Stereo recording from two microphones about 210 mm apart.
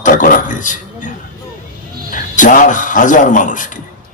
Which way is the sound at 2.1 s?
40° left (ahead or behind).